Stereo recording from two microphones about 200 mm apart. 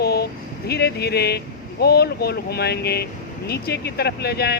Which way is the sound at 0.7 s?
55° left (ahead or behind).